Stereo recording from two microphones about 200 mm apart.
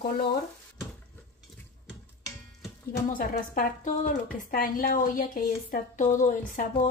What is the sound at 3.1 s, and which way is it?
A woman's voice, 45° left (ahead or behind).